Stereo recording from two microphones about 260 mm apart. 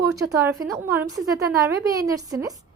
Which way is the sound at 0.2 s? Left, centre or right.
Centre.